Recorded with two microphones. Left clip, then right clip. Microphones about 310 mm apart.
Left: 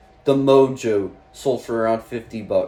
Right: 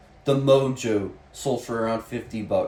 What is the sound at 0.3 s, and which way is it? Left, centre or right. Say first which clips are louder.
Speech: left 5 dB; centre.